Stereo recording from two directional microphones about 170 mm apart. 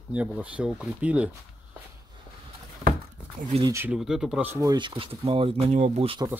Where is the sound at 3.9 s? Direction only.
5° right (ahead or behind).